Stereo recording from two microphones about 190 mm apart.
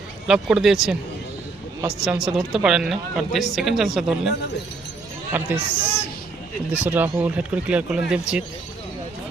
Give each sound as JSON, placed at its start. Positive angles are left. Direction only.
{"t": 0.3, "sound": "speech", "side_deg": -5}
{"t": 2.0, "sound": "speech", "side_deg": 0}
{"t": 4.3, "sound": "speech", "side_deg": 65}
{"t": 5.3, "sound": "speech", "side_deg": -10}